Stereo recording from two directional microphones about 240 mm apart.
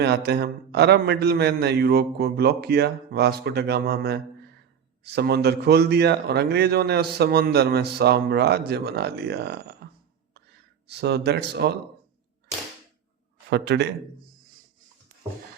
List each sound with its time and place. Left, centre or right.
0.0 s speech: right
13.5 s speech: right